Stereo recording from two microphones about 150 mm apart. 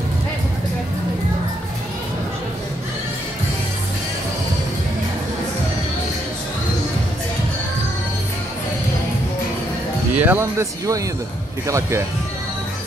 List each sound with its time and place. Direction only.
10.1 s speech: 15° right (ahead or behind)